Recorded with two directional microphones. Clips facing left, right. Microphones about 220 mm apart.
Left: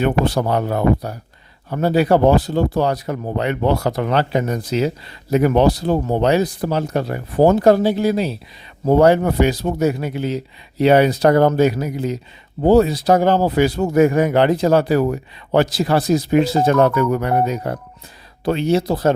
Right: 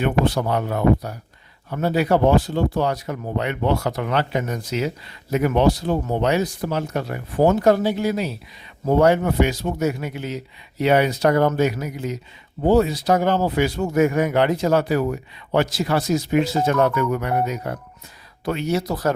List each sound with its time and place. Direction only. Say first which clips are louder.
0.0 s speech: left 3 dB; 35° left (ahead or behind)